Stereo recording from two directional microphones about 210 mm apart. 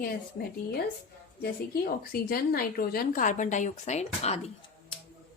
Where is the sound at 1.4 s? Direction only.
45° left (ahead or behind); by 4.5 s 30° left (ahead or behind).